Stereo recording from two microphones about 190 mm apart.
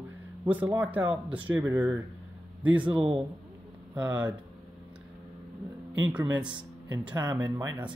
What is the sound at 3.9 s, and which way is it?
Speech, 10° right (ahead or behind).